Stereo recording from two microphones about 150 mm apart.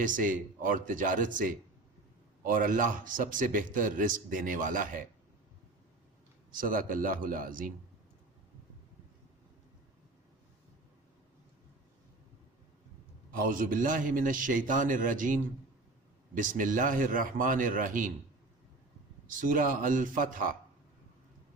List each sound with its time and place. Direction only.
0.0 s a man's voice: 65° right (ahead or behind)
6.5 s a man's voice: 65° right (ahead or behind)
13.3 s a man's voice: 65° right (ahead or behind)
19.4 s a man's voice: 60° right (ahead or behind)